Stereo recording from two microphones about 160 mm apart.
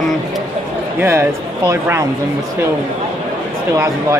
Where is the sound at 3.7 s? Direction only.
15° right (ahead or behind).